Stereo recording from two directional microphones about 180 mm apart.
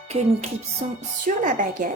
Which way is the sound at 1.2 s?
45° right (ahead or behind).